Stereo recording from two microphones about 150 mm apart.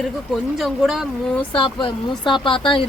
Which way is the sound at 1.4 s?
35° left (ahead or behind).